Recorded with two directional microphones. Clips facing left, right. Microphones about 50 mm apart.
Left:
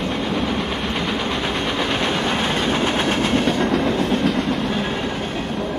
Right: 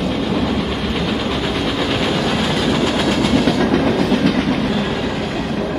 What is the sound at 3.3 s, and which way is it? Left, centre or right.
Train, right.